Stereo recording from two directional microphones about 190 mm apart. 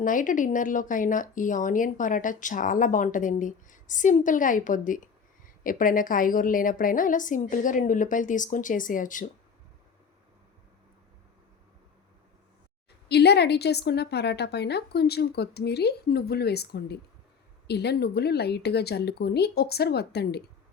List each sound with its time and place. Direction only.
0.0 s speech: 45° left (ahead or behind)
13.1 s a woman's voice: 60° left (ahead or behind)